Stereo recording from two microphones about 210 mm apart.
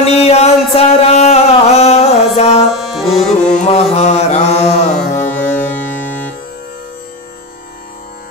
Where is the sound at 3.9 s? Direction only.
30° left (ahead or behind).